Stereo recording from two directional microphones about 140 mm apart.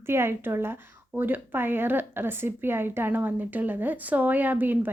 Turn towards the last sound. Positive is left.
turn(degrees=-15)  # may be behind; listen again after turning